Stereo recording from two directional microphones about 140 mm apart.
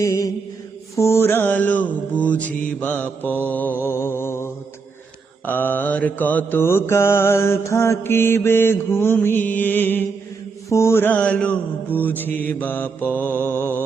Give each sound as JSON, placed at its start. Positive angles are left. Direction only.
{"t": 0.0, "sound": "mantra", "side_deg": 20}
{"t": 5.5, "sound": "mantra", "side_deg": 15}